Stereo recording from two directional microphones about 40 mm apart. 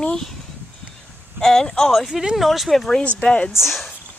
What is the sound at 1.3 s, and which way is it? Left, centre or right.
Speech, centre.